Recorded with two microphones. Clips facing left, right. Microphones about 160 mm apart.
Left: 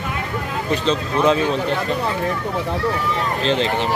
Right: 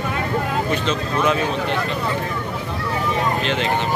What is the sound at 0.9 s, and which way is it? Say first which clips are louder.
Speech: left 6 dB; 30° left (ahead or behind).